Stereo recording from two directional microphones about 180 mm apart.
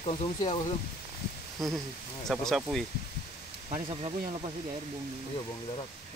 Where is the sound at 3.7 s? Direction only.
30° right (ahead or behind).